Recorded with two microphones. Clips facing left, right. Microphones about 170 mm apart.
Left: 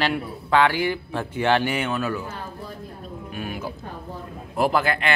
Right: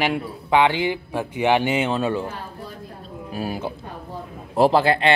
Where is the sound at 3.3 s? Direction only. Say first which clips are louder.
Right 5 dB; 35° right (ahead or behind).